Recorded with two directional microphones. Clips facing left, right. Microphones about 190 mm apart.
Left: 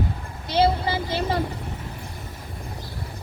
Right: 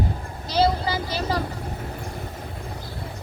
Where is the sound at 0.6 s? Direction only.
25° left (ahead or behind).